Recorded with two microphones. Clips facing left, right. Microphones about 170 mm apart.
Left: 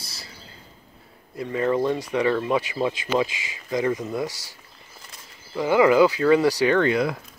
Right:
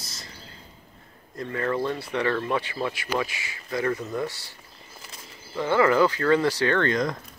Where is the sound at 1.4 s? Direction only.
15° left (ahead or behind).